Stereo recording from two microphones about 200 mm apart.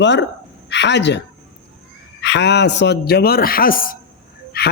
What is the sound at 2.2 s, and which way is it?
A man's voice, 60° left (ahead or behind).